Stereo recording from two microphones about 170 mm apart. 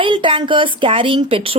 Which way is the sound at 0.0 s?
30° right (ahead or behind).